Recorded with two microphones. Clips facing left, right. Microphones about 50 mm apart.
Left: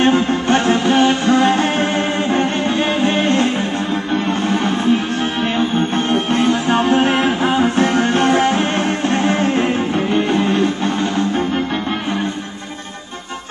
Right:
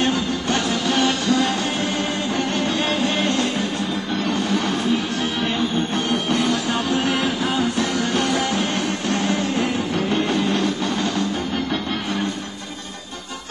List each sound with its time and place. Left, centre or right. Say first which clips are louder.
0.0 s music: left 7 dB; left